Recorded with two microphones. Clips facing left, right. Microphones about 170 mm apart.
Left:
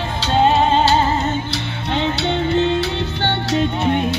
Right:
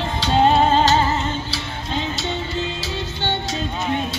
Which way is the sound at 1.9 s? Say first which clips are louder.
Left 6 dB; 70° left (ahead or behind).